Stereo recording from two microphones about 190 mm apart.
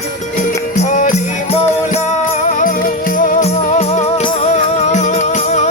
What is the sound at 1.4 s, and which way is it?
Music, 35° left (ahead or behind).